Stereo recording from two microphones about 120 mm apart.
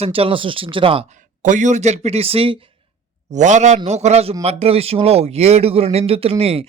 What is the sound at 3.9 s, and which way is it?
Speech, 65° right (ahead or behind).